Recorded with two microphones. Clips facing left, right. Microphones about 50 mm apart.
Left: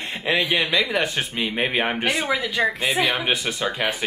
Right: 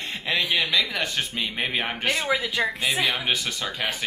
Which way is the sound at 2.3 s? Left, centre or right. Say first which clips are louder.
Left 2 dB; centre.